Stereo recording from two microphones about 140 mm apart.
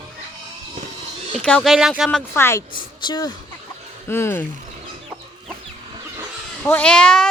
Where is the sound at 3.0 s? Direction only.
30° left (ahead or behind).